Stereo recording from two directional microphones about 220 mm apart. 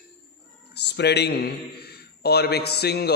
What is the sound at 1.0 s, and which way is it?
A man's voice, 50° left (ahead or behind).